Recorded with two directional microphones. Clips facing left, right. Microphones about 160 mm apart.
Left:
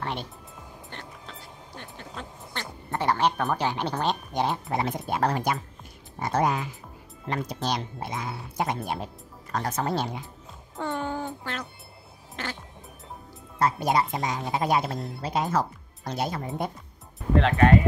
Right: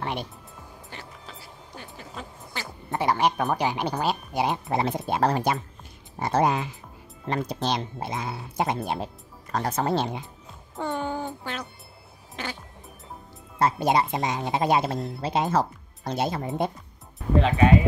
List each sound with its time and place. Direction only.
0.0 s music: 10° right (ahead or behind)
0.8 s a sound: 5° right (ahead or behind)
2.9 s speech: 10° right (ahead or behind)
4.6 s speech: 25° right (ahead or behind)
10.8 s music: 15° right (ahead or behind)
12.4 s speech: 15° right (ahead or behind)
13.6 s speech: 25° right (ahead or behind)
14.9 s speech: centre (ahead or behind)
15.2 s speech: 25° right (ahead or behind)
17.4 s speech: 10° right (ahead or behind)